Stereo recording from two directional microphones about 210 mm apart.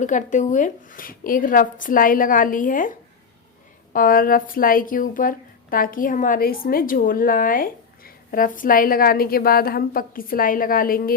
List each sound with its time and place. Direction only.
0.0 s a woman's voice: 35° left (ahead or behind)